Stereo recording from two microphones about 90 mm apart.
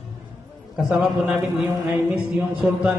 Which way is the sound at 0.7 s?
10° right (ahead or behind).